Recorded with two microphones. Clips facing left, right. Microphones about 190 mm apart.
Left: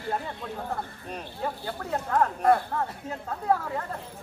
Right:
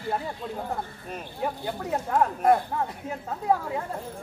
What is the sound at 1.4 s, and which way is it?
A man's voice, 15° right (ahead or behind).